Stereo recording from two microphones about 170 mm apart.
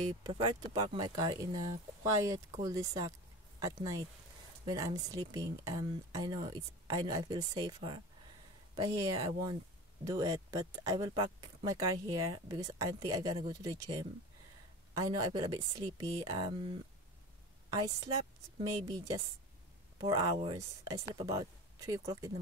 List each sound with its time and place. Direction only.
0.2 s speech: 25° right (ahead or behind)
17.6 s a woman's voice: 20° right (ahead or behind)